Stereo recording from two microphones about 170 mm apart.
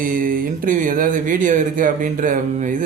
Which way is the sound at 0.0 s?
55° right (ahead or behind).